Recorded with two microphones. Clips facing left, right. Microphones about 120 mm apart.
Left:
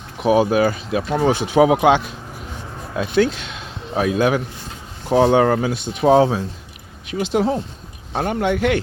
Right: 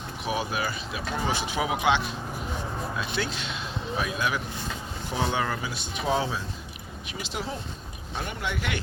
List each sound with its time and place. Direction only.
0.2 s speech: 55° left (ahead or behind)
1.8 s speech: 50° left (ahead or behind)
5.1 s speech: 70° left (ahead or behind)
8.1 s speech: 70° left (ahead or behind)